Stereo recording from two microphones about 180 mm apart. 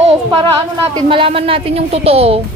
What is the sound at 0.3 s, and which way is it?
A woman's voice, 25° right (ahead or behind).